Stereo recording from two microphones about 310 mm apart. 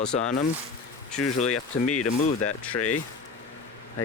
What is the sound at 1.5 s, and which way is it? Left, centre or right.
Speech, left.